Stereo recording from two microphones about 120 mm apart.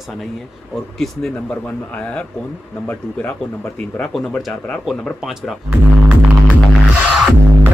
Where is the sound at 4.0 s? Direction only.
Centre (ahead or behind).